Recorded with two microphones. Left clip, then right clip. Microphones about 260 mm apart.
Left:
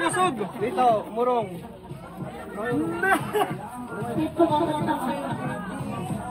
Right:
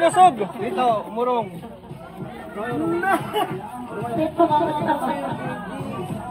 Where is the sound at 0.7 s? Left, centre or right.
Right.